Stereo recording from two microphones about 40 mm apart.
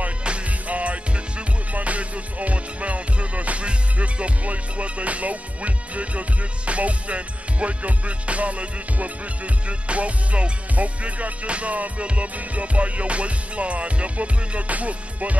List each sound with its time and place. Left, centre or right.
0.2 s music: right